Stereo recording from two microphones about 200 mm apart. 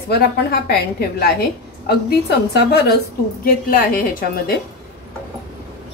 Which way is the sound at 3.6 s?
45° left (ahead or behind).